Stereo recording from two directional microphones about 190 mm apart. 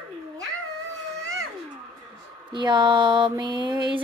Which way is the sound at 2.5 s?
25° right (ahead or behind).